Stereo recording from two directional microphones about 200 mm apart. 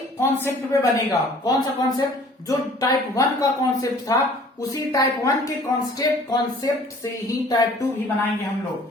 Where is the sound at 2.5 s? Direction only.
20° left (ahead or behind).